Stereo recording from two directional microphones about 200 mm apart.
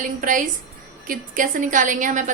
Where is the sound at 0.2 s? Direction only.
40° right (ahead or behind).